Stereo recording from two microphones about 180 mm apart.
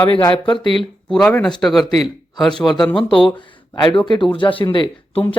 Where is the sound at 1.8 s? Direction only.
20° left (ahead or behind).